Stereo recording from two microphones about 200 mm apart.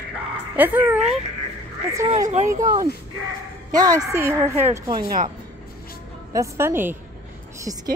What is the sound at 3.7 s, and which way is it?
A woman's voice, 15° right (ahead or behind).